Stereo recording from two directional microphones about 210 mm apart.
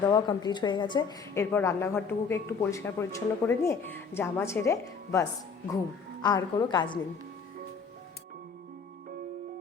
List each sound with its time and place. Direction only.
0.0 s a woman's voice: 20° left (ahead or behind)
6.2 s a woman's voice: 20° left (ahead or behind)